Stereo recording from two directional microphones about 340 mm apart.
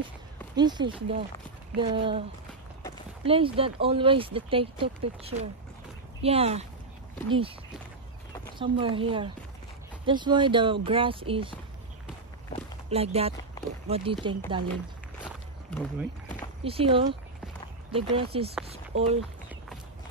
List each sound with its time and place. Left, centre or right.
0.6 s speech: centre
3.3 s speech: centre
8.5 s speech: centre
10.0 s speech: centre
12.9 s speech: centre
15.2 s walk: centre
16.6 s speech: centre